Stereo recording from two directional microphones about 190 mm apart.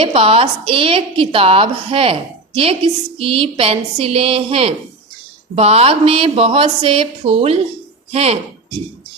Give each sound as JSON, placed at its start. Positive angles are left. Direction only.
{"t": 0.0, "sound": "a woman's voice", "side_deg": -30}
{"t": 3.2, "sound": "a woman's voice", "side_deg": -30}